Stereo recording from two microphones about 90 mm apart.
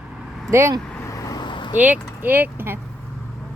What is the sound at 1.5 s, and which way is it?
Vehicle, 60° left (ahead or behind).